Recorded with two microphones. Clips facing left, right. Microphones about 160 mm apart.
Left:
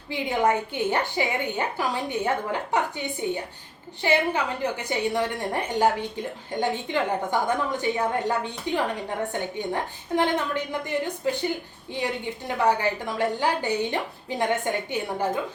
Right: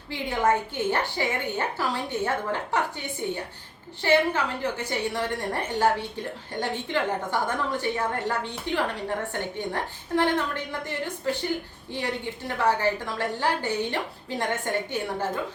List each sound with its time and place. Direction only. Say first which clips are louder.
0.1 s a woman's voice: left 1 dB; 15° left (ahead or behind)
12.5 s a woman's voice: left 1 dB; 15° left (ahead or behind)